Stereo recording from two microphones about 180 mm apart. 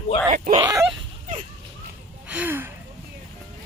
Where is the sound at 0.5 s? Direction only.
20° right (ahead or behind).